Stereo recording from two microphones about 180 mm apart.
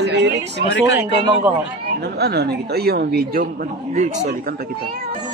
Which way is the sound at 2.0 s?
65° right (ahead or behind).